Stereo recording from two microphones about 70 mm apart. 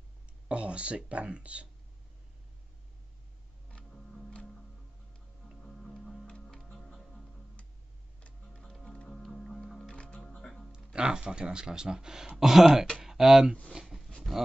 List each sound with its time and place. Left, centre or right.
0.5 s speech: centre
3.7 s music: centre
5.6 s music: centre
10.7 s speech: centre
13.0 s a sound: centre
14.3 s pig: centre